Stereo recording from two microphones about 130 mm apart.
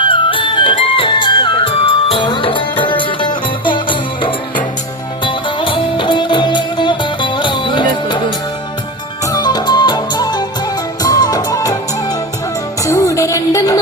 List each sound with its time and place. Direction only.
0.0 s music: 40° left (ahead or behind)
9.2 s music: 30° left (ahead or behind)
12.8 s music: 25° left (ahead or behind)